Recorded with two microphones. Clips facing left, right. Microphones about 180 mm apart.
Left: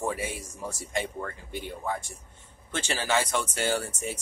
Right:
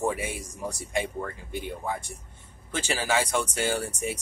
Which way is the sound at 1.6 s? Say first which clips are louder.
Left 1 dB; 15° right (ahead or behind).